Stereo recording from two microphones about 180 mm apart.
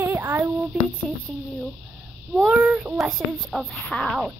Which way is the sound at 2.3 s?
5° right (ahead or behind).